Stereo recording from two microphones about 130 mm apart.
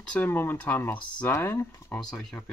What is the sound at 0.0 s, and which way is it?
Speech, 10° left (ahead or behind).